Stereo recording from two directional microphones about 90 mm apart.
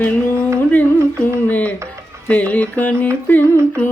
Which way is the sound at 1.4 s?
20° left (ahead or behind).